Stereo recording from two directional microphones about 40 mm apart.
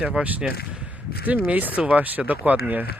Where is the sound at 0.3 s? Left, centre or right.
Right.